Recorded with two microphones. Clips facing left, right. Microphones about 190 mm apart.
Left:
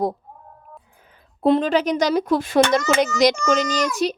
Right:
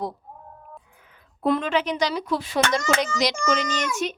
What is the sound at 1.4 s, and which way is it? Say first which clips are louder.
A child's voice: left 5 dB; 30° left (ahead or behind).